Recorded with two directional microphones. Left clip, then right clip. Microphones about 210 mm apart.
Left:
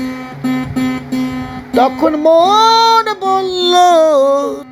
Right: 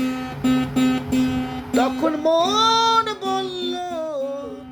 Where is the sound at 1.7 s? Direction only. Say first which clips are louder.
Left 9 dB; 40° left (ahead or behind).